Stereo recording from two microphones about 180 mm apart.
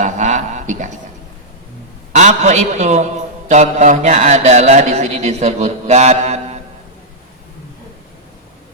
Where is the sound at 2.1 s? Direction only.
40° right (ahead or behind).